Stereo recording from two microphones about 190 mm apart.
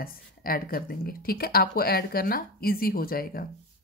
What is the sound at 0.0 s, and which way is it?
Speech, 50° left (ahead or behind).